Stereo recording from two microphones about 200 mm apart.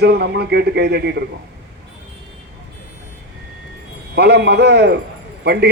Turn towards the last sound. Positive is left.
turn(degrees=-55)  # may be behind; listen again after turning